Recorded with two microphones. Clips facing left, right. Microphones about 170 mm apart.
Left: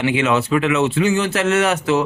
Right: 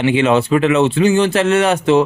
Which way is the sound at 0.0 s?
30° right (ahead or behind).